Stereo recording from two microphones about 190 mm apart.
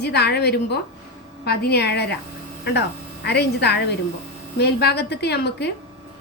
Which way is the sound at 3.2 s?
60° left (ahead or behind).